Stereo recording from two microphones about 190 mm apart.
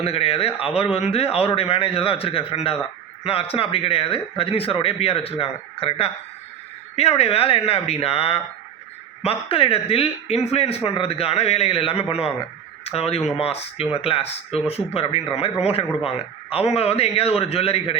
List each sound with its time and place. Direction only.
0.0 s speech: 30° left (ahead or behind)